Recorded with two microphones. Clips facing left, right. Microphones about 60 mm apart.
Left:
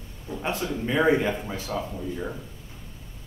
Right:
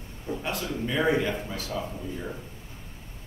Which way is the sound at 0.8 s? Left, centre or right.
Centre.